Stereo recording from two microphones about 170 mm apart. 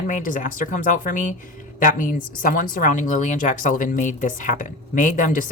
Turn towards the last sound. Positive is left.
turn(degrees=50)  # may be behind; listen again after turning